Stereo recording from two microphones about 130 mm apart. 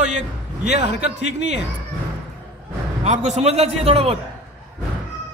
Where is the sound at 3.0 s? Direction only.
65° right (ahead or behind).